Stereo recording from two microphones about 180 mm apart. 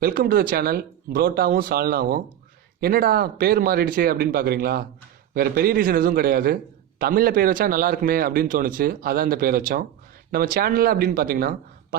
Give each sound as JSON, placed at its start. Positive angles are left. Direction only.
{"t": 0.0, "sound": "a man's voice", "side_deg": -55}